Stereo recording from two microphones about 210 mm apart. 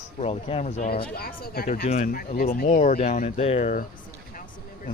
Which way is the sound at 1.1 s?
45° left (ahead or behind).